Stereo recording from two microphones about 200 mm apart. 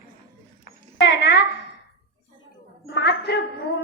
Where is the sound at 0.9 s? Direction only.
60° left (ahead or behind).